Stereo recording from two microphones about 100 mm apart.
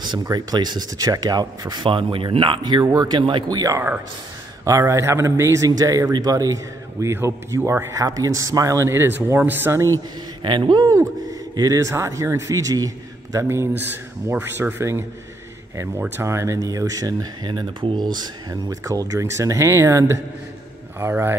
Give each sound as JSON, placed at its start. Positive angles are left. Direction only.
{"t": 0.2, "sound": "speech", "side_deg": -45}
{"t": 3.5, "sound": "speech", "side_deg": -35}
{"t": 10.4, "sound": "speech", "side_deg": -50}
{"t": 11.5, "sound": "speech", "side_deg": -35}